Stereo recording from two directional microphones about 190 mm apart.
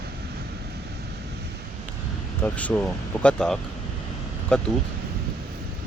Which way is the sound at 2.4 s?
5° left (ahead or behind).